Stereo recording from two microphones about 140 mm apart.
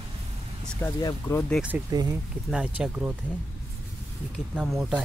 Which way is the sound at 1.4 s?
5° left (ahead or behind).